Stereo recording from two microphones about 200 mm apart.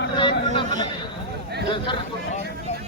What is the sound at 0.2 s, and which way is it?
Chatter, 25° left (ahead or behind).